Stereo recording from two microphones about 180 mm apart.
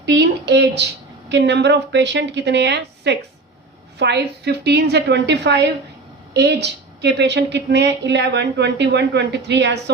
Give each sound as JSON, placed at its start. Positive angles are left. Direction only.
{"t": 0.0, "sound": "a woman's voice", "side_deg": -75}